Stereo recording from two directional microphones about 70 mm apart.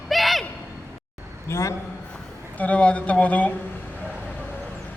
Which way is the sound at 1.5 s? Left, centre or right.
Left.